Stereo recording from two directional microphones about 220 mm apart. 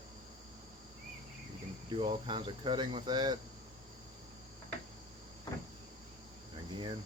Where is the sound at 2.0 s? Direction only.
25° right (ahead or behind).